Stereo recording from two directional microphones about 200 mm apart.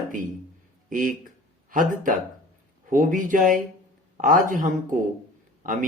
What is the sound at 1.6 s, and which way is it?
Speech, 40° right (ahead or behind).